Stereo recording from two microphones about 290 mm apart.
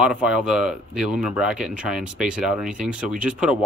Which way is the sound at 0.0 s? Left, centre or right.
Centre.